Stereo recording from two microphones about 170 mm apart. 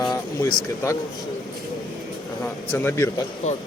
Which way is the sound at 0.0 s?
25° left (ahead or behind).